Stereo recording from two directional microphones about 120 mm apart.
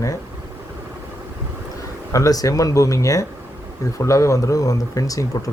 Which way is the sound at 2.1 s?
30° left (ahead or behind).